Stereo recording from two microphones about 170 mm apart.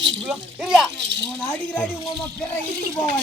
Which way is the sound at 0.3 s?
Centre (ahead or behind).